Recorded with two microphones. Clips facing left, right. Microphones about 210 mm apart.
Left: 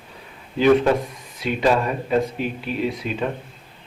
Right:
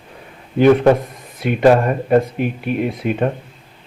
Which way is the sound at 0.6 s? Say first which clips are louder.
Right 5 dB; 55° right (ahead or behind).